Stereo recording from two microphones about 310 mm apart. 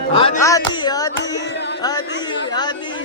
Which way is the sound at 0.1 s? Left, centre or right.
Centre.